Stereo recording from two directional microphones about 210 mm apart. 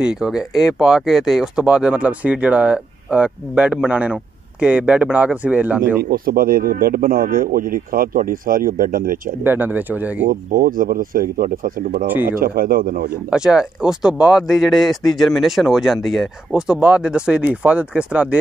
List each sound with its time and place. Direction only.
0.0 s speech: 5° right (ahead or behind)
6.0 s speech: 45° right (ahead or behind)
9.4 s speech: 10° right (ahead or behind)
10.2 s speech: 45° right (ahead or behind)
12.1 s speech: 10° right (ahead or behind)
12.4 s speech: 45° right (ahead or behind)
13.3 s speech: 5° right (ahead or behind)